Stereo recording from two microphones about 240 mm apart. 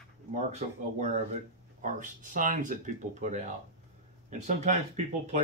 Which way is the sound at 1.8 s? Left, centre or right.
Right.